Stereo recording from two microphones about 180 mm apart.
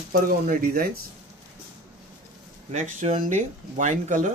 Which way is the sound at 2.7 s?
40° right (ahead or behind).